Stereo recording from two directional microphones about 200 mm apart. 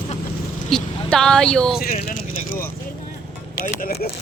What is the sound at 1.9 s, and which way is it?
Speech, 35° left (ahead or behind).